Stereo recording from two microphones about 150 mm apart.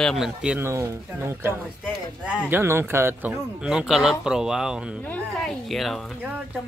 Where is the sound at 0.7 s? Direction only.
20° right (ahead or behind).